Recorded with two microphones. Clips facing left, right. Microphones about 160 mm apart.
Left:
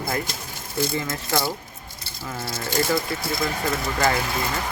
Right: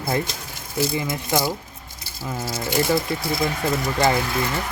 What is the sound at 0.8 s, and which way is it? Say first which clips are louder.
Speech: right 2 dB; 15° right (ahead or behind).